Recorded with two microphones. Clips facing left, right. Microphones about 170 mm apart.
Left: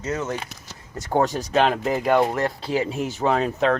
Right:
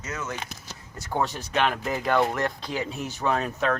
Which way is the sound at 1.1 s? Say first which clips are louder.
Left 6 dB; 45° left (ahead or behind).